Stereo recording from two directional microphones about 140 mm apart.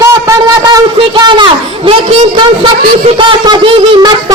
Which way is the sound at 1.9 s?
35° right (ahead or behind).